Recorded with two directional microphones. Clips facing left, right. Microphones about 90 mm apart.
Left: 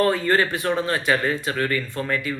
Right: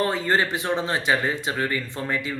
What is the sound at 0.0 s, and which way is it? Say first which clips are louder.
Speech: left 3 dB; 20° right (ahead or behind).